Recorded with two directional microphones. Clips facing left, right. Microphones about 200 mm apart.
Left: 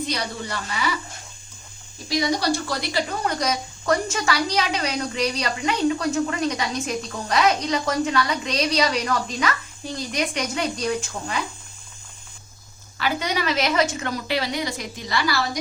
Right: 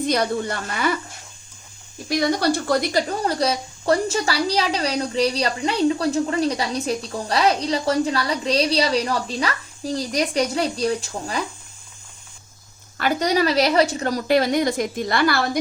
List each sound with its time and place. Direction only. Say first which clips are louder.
0.0 s a woman's voice: right 7 dB; 50° right (ahead or behind)
2.0 s speech: right 2 dB; 55° right (ahead or behind); by 11.4 s 35° right (ahead or behind)
13.0 s a woman's voice: right 5 dB; 40° right (ahead or behind)